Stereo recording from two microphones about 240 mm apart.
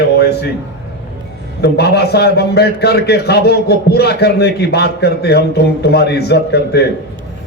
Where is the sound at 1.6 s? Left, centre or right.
Left.